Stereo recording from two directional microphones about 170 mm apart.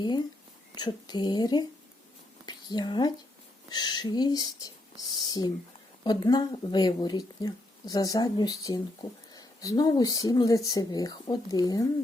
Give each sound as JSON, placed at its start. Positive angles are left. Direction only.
{"t": 0.0, "sound": "speech", "side_deg": 25}